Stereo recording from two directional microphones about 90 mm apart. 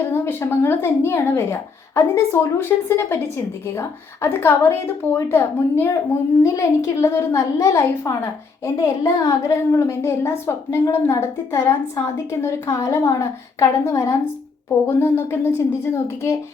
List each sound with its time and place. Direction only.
0.1 s a woman's voice: 25° left (ahead or behind)